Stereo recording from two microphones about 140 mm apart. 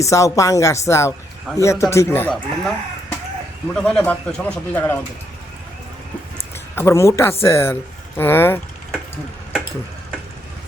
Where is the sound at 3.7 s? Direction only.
5° left (ahead or behind).